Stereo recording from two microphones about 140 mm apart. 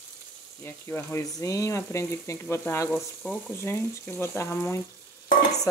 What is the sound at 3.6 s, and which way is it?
Speech, 15° left (ahead or behind).